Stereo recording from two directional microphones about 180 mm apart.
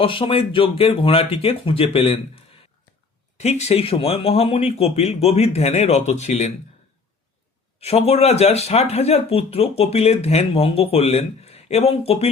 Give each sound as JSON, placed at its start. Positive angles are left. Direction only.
{"t": 0.0, "sound": "speech", "side_deg": 30}
{"t": 7.8, "sound": "speech", "side_deg": 35}